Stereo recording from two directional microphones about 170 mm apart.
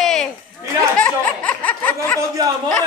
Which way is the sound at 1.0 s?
10° left (ahead or behind).